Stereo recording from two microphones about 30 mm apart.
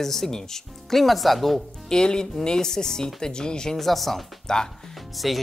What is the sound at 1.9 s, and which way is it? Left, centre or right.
Speech, left.